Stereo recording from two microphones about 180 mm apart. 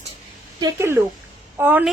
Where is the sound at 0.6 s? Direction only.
15° right (ahead or behind).